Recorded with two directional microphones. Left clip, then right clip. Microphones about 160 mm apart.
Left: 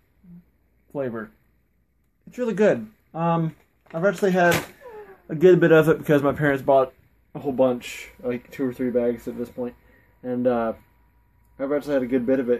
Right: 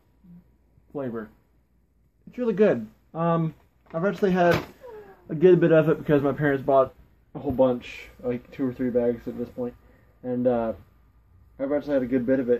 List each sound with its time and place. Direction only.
0.9 s speech: 35° left (ahead or behind)
2.2 s a man's voice: 5° left (ahead or behind)